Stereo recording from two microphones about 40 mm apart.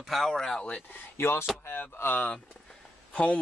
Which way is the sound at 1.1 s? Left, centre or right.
Left.